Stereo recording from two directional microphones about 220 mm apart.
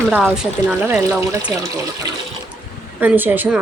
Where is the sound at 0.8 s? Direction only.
10° right (ahead or behind).